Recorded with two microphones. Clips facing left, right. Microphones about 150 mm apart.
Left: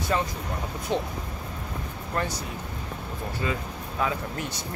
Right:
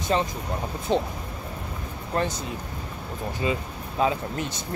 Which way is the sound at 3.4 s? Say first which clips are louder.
Right 4 dB; 20° right (ahead or behind).